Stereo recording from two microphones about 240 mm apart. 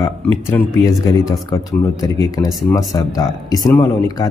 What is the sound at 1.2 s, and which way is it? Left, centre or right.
Speech, centre.